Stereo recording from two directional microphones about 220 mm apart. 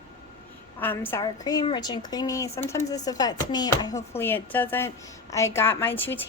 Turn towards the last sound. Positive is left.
turn(degrees=10)  # may be behind; listen again after turning